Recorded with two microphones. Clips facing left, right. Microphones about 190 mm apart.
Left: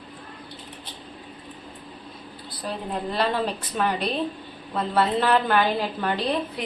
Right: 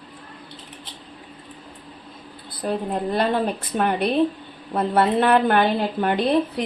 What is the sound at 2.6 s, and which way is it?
A woman's voice, 50° right (ahead or behind).